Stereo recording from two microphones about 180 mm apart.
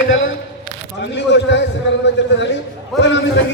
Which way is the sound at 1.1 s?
75° left (ahead or behind).